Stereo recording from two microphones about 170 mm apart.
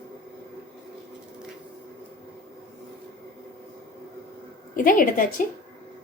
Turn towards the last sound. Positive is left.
turn(degrees=55)  # may be behind; listen again after turning